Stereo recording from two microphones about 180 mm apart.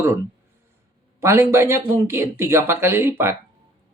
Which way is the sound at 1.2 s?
15° right (ahead or behind).